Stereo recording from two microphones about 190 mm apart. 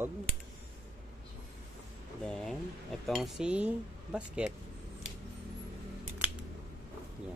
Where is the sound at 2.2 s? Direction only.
5° left (ahead or behind).